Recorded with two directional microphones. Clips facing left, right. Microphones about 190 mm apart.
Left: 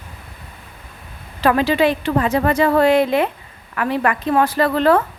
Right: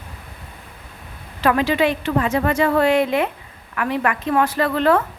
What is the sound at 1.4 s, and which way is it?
Speech, 35° left (ahead or behind).